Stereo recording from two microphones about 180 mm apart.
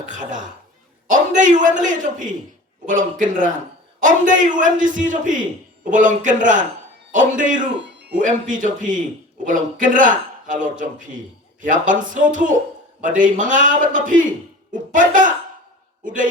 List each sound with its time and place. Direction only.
0.0 s speech: 45° right (ahead or behind)